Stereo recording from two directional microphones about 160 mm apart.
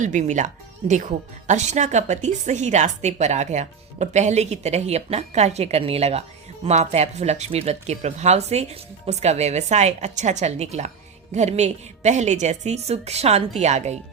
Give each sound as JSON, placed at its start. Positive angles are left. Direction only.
{"t": 0.0, "sound": "speech", "side_deg": -50}